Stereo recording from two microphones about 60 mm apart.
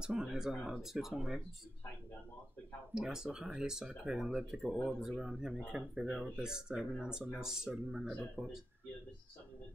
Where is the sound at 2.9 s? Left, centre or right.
Centre.